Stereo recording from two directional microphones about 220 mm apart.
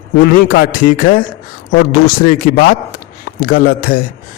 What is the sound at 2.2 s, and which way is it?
Speech, 40° left (ahead or behind).